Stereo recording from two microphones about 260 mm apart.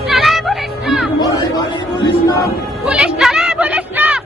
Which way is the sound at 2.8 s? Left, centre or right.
Centre.